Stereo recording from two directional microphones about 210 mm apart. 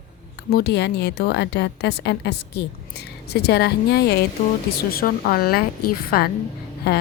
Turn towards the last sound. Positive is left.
turn(degrees=50)  # may be behind; listen again after turning